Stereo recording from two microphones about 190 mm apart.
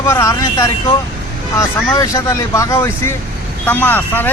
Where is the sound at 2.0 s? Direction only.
15° left (ahead or behind).